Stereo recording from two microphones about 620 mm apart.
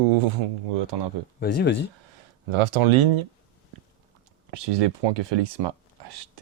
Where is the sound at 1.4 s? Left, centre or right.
Centre.